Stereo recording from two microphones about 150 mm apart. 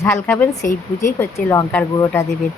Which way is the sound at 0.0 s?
15° left (ahead or behind).